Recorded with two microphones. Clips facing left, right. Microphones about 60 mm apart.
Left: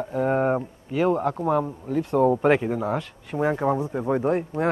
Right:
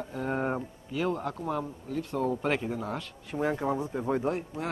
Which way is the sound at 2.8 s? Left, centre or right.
Left.